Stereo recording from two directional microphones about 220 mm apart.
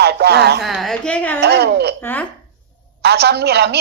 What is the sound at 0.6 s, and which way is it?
Speech, centre (ahead or behind).